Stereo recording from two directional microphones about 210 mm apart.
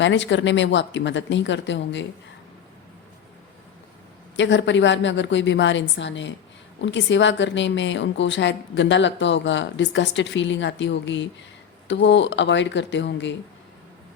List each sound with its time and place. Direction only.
0.0 s a woman's voice: 60° left (ahead or behind)
4.4 s a woman's voice: 60° left (ahead or behind)